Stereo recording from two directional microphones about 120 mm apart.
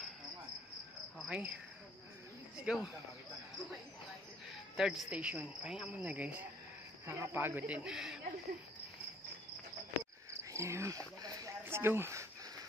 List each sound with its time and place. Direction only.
1.1 s cricket: 5° right (ahead or behind)
2.6 s speech: 10° right (ahead or behind)
4.7 s speech: 5° right (ahead or behind)
10.5 s a sound: 25° right (ahead or behind)
11.6 s speech: 20° right (ahead or behind)